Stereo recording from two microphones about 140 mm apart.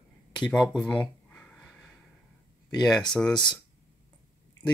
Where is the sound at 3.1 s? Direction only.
5° left (ahead or behind).